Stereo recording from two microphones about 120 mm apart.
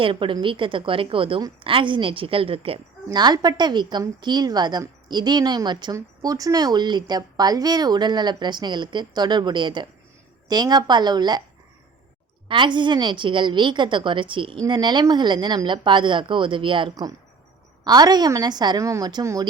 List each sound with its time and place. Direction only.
0.0 s a woman's voice: 45° right (ahead or behind)
3.1 s speech: 35° right (ahead or behind)
12.5 s speech: 40° right (ahead or behind)